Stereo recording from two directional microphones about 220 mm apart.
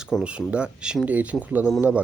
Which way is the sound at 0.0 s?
Centre (ahead or behind).